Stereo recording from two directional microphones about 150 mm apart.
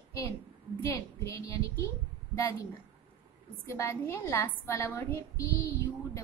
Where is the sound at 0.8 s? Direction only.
20° left (ahead or behind).